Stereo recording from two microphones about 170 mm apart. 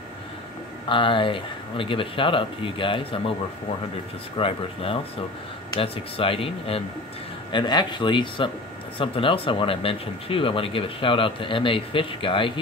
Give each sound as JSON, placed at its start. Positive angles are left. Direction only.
{"t": 0.8, "sound": "speech", "side_deg": 30}
{"t": 4.4, "sound": "speech", "side_deg": 30}